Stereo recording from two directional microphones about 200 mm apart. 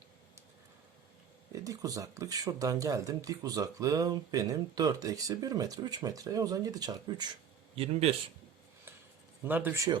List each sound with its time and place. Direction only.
1.6 s speech: 15° right (ahead or behind)
7.8 s a man's voice: 30° right (ahead or behind)
9.4 s speech: 10° right (ahead or behind)